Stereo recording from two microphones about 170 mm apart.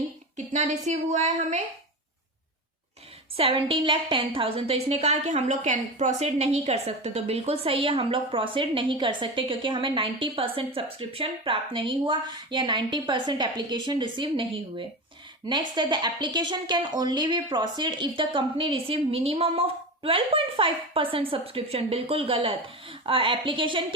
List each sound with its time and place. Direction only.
0.3 s a woman's voice: 45° right (ahead or behind)
3.3 s speech: 30° right (ahead or behind)